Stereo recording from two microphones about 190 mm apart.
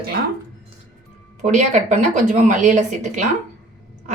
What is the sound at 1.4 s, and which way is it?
A woman's voice, 40° right (ahead or behind).